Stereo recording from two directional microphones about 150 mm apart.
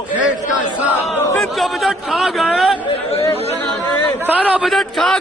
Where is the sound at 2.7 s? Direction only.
35° left (ahead or behind).